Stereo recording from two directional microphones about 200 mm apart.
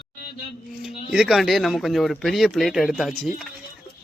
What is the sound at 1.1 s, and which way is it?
Speech, 5° right (ahead or behind).